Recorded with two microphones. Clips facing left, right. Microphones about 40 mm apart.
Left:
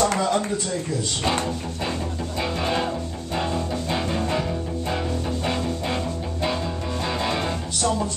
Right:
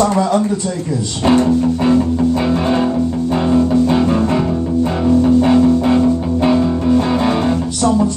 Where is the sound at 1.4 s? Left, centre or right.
Right.